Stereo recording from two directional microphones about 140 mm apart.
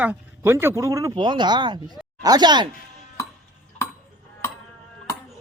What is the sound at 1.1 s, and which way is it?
Speech, 35° right (ahead or behind).